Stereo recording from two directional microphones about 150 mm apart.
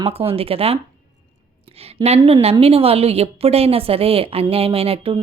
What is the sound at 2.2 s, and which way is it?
A woman's voice, 40° right (ahead or behind).